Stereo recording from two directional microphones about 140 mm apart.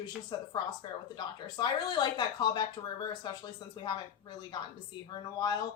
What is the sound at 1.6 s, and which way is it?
A woman's voice, 30° left (ahead or behind).